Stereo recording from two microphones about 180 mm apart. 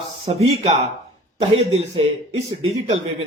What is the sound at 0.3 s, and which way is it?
A man's voice, 40° right (ahead or behind).